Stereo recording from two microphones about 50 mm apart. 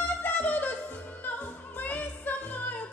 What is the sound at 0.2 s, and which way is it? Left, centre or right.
Music, left.